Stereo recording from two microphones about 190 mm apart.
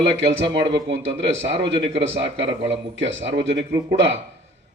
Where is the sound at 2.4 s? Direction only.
75° right (ahead or behind).